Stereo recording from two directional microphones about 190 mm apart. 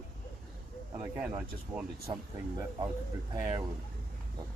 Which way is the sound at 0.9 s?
10° right (ahead or behind).